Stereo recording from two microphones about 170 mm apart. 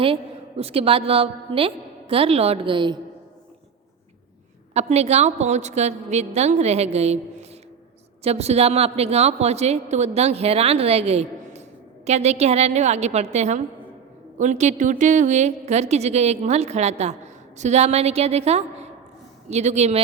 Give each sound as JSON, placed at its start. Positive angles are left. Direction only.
{"t": 0.0, "sound": "a woman's voice", "side_deg": -35}
{"t": 4.7, "sound": "a woman's voice", "side_deg": -40}
{"t": 8.2, "sound": "a woman's voice", "side_deg": -40}